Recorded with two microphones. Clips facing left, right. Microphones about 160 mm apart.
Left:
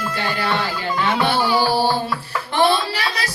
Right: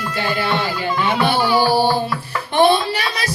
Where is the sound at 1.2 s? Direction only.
15° right (ahead or behind).